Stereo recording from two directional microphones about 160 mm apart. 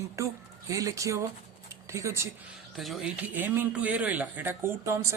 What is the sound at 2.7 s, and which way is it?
A man's voice, centre (ahead or behind).